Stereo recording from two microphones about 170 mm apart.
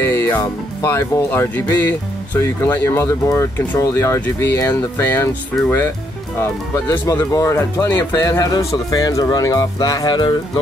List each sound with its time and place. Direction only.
0.0 s speech: 15° left (ahead or behind)
6.4 s speech: 15° left (ahead or behind)